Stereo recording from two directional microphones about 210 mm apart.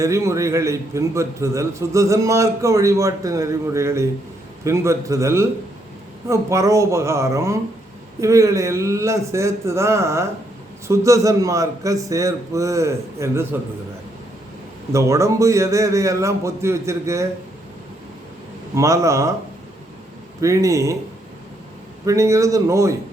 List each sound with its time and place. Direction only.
0.0 s a man's voice: 15° right (ahead or behind)
14.9 s a man's voice: 15° right (ahead or behind)
18.7 s a man's voice: 15° right (ahead or behind)
20.4 s a man's voice: 15° right (ahead or behind)
22.0 s a man's voice: 15° right (ahead or behind)